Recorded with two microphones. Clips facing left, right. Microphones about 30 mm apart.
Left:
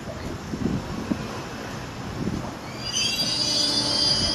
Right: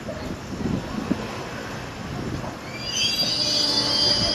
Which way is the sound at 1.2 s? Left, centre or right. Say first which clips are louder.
Right 2 dB; centre.